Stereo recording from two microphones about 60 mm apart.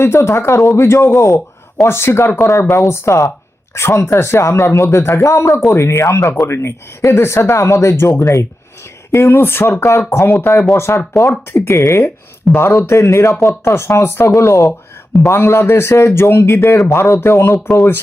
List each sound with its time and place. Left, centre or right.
0.0 s speech: left
6.0 s speech: left
6.4 s speech: left
8.2 s speech: left
9.1 s speech: left
11.7 s speech: left
12.0 s speech: left
14.3 s speech: left